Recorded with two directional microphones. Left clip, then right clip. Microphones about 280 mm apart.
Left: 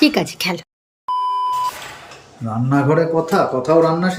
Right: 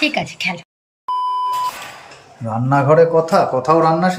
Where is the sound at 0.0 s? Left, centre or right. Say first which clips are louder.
Left 2 dB; centre.